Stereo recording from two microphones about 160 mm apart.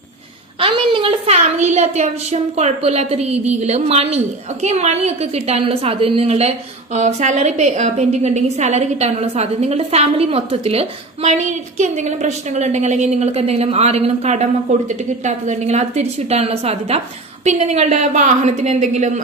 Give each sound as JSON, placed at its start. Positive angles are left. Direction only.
{"t": 0.6, "sound": "a woman's voice", "side_deg": -35}